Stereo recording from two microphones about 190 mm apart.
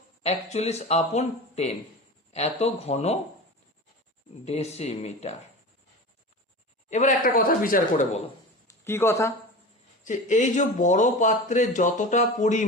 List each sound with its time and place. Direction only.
0.2 s speech: 35° left (ahead or behind)
4.4 s speech: 35° left (ahead or behind)
6.9 s speech: 40° left (ahead or behind)
8.6 s speech: 10° left (ahead or behind)
10.0 s speech: 40° left (ahead or behind)